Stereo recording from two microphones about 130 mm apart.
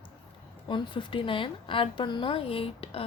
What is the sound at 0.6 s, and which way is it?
A woman's voice, 40° left (ahead or behind).